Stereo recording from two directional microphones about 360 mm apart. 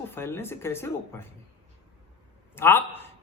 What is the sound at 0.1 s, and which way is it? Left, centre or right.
A man's voice, centre.